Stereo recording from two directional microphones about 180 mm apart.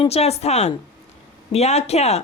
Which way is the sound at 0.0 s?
35° left (ahead or behind).